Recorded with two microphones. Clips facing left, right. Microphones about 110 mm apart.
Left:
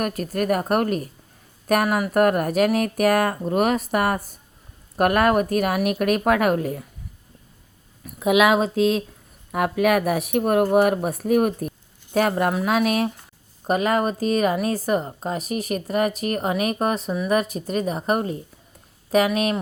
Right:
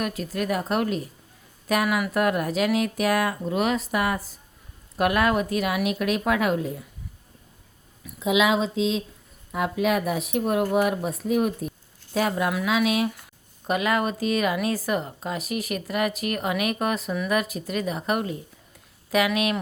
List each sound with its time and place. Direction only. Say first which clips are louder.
0.0 s speech: left 4 dB; 50° left (ahead or behind)
8.0 s a woman's voice: left 4 dB; 55° left (ahead or behind); by 19.5 s 40° left (ahead or behind)